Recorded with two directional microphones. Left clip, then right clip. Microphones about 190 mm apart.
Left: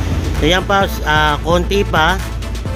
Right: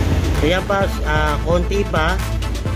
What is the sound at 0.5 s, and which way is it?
Speech, 45° left (ahead or behind).